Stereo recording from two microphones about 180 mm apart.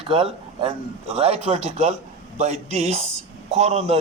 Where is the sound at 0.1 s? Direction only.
30° right (ahead or behind).